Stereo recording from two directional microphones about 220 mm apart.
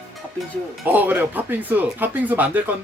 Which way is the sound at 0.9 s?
10° right (ahead or behind).